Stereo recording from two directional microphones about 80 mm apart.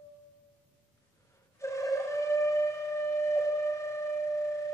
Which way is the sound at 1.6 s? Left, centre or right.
Left.